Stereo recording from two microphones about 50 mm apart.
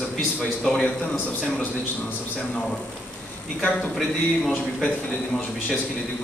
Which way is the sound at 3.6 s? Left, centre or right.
Centre.